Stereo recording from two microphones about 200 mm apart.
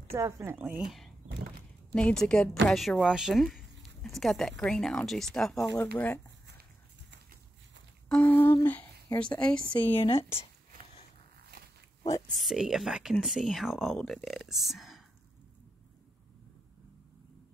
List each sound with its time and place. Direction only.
0.1 s a woman's voice: 10° right (ahead or behind); by 6.2 s 10° left (ahead or behind)
8.1 s humming: 5° left (ahead or behind)
9.4 s speech: 5° left (ahead or behind)
9.9 s speech: 25° left (ahead or behind)
12.4 s speech: centre (ahead or behind)